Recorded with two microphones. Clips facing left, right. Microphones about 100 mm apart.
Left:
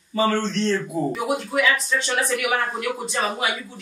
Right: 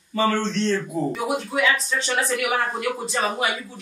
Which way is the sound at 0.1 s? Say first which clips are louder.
Even; 10° left (ahead or behind).